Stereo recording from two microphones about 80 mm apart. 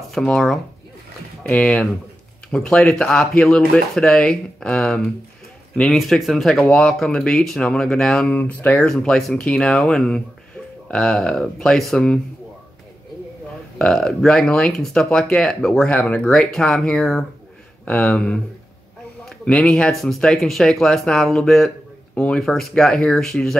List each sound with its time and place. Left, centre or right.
0.1 s speech: centre
8.3 s speech: centre
13.7 s speech: centre
22.1 s speech: centre
22.4 s speech: centre